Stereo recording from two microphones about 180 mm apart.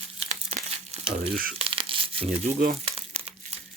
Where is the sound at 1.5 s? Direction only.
30° right (ahead or behind).